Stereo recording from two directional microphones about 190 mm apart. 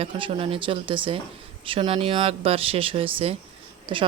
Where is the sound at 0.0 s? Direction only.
25° right (ahead or behind).